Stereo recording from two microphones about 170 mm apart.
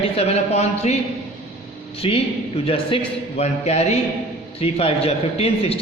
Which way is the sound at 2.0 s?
35° left (ahead or behind).